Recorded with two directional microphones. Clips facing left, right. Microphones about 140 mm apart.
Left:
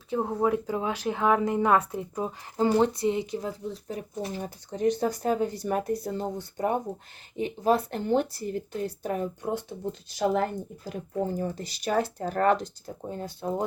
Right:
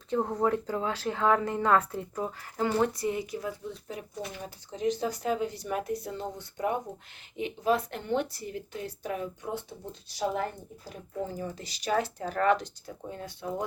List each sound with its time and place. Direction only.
0.1 s speech: 10° left (ahead or behind); by 4.0 s 35° left (ahead or behind)
4.7 s speech: 50° left (ahead or behind)
10.2 s speech: 65° left (ahead or behind)
11.3 s speech: 40° left (ahead or behind)